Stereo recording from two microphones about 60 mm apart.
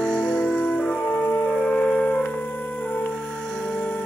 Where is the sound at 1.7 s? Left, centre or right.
Centre.